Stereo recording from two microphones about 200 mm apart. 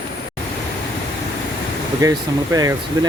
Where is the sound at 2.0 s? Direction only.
15° right (ahead or behind).